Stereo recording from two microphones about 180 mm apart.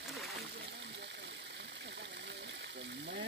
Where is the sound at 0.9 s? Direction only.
70° right (ahead or behind).